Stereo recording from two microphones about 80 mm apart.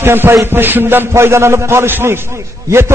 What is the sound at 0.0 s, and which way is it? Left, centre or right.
A man's voice, right.